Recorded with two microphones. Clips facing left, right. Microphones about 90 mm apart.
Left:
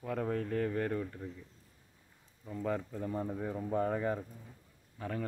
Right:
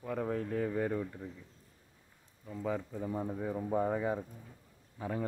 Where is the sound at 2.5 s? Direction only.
Centre (ahead or behind).